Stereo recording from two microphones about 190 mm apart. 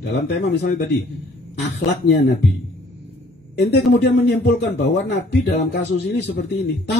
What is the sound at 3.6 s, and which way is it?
Speech, 60° left (ahead or behind).